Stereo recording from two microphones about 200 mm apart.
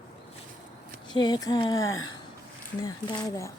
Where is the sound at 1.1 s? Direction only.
20° left (ahead or behind).